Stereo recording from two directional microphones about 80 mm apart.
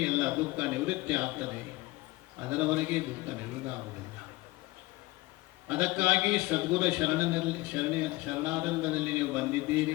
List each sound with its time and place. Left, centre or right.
0.0 s a man's voice: centre
5.6 s a man's voice: centre